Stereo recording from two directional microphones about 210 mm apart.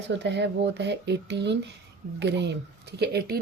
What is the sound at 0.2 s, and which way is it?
Speech, 55° right (ahead or behind).